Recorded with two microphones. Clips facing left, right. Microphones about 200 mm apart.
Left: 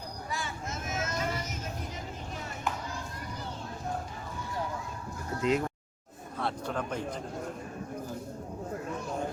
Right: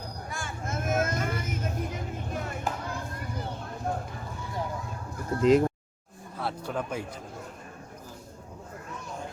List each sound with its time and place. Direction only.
0.3 s vehicle: 50° right (ahead or behind)
5.4 s speech: 35° right (ahead or behind)
6.4 s a man's voice: 5° right (ahead or behind)